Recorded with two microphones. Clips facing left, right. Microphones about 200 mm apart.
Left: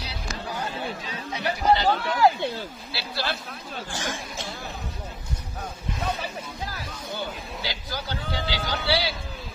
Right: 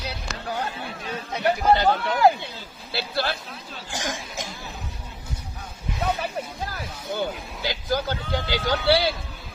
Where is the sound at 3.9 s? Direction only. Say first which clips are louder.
Right 4 dB; 15° right (ahead or behind).